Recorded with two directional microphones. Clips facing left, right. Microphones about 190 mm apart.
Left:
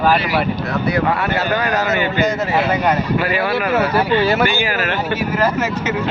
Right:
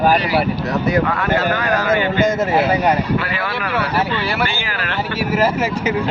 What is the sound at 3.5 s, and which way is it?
Speech, 45° left (ahead or behind).